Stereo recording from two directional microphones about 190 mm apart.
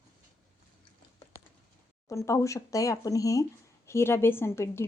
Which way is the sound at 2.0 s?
15° left (ahead or behind).